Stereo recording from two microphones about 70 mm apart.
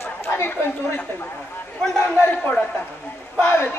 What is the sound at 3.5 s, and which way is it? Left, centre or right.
Speech, left.